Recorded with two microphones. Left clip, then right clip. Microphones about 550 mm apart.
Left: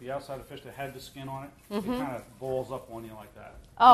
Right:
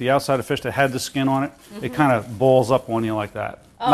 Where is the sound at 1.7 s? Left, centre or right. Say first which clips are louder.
Right 2 dB; left.